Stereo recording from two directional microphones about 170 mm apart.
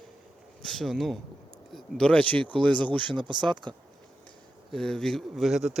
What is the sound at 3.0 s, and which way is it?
Speech, 25° right (ahead or behind).